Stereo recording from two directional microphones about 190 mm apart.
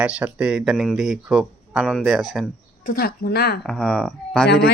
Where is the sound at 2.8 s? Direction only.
50° left (ahead or behind).